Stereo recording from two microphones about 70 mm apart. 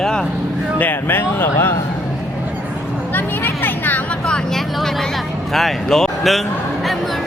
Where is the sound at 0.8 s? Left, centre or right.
Left.